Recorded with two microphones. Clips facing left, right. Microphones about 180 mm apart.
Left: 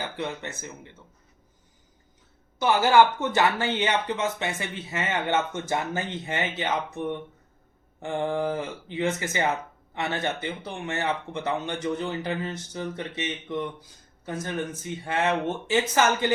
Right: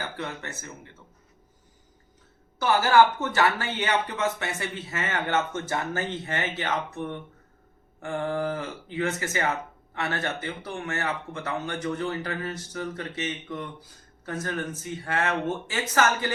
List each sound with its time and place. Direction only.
0.2 s speech: 20° left (ahead or behind)
2.6 s speech: 15° left (ahead or behind)